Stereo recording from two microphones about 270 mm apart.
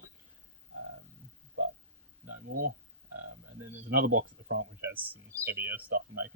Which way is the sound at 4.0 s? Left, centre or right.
Right.